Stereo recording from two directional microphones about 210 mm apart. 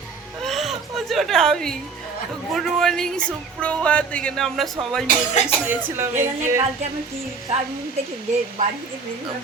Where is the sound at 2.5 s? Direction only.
Centre (ahead or behind).